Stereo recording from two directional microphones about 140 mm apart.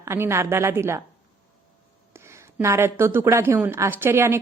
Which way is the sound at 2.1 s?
20° right (ahead or behind).